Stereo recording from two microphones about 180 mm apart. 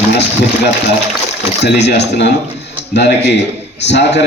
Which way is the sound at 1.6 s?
70° left (ahead or behind).